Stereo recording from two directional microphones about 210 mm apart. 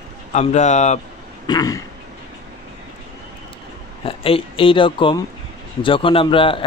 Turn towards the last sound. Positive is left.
turn(degrees=25)  # may be behind; listen again after turning